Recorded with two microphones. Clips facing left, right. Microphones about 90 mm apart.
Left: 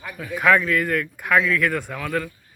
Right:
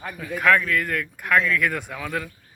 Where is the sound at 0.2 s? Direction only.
5° left (ahead or behind).